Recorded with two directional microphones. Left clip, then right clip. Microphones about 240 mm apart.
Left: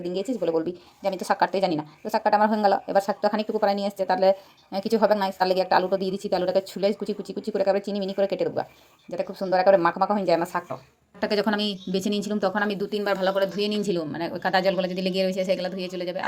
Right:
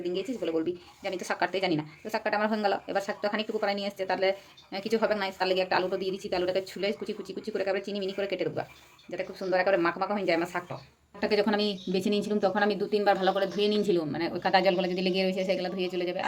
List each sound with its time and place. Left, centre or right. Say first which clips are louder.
0.0 s a woman's voice: left 5 dB; centre
11.2 s speech: left 2 dB; left